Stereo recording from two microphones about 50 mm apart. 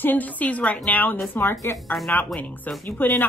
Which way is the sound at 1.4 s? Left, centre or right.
Left.